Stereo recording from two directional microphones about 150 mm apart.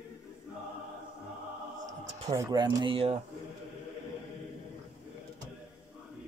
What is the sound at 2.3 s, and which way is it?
Speech, 25° right (ahead or behind).